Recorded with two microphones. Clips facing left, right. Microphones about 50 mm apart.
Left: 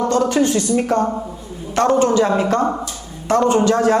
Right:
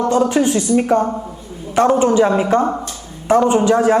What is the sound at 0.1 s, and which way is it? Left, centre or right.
A man's voice, centre.